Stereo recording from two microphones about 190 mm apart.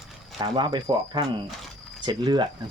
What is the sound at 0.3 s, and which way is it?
Speech, 25° right (ahead or behind).